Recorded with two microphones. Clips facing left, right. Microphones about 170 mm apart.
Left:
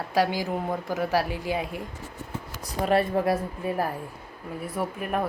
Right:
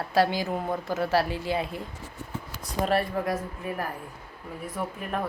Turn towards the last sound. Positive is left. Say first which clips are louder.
# left 3 dB
turn(degrees=10)  # may be behind; listen again after turning